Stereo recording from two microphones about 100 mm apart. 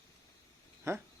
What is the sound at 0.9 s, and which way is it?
Speech, 30° right (ahead or behind).